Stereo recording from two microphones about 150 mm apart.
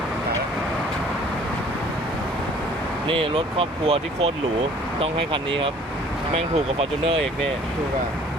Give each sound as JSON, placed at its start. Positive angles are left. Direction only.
{"t": 3.1, "sound": "speech", "side_deg": -40}